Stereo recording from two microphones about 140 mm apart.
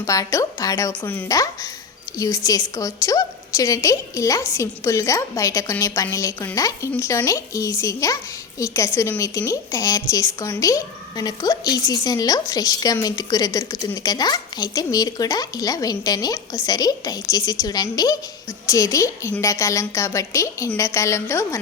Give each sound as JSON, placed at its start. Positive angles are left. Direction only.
{"t": 0.0, "sound": "a woman's voice", "side_deg": 25}